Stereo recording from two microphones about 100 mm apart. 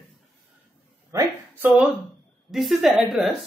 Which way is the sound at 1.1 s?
35° right (ahead or behind).